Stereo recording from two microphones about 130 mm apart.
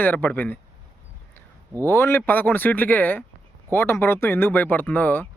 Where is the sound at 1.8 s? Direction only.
20° left (ahead or behind).